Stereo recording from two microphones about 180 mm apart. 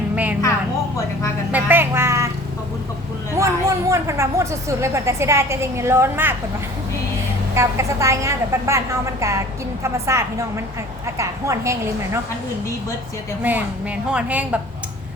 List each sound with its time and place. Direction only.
1.5 s vehicle: 10° right (ahead or behind)
3.3 s speech: 15° right (ahead or behind)
7.5 s a woman's voice: 15° right (ahead or behind)
13.4 s a woman's voice: 10° right (ahead or behind)